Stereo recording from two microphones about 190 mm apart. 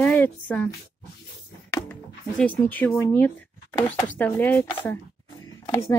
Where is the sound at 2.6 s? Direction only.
10° left (ahead or behind).